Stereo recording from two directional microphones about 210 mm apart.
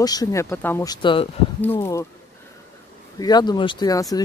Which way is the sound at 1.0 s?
25° left (ahead or behind).